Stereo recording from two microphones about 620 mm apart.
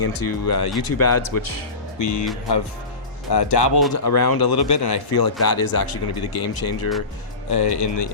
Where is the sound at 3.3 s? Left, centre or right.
Left.